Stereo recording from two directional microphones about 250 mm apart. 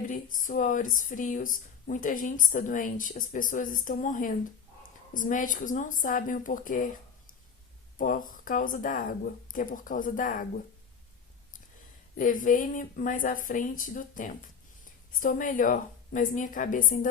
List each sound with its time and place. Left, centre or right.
0.1 s speech: left
7.9 s speech: left
12.1 s speech: left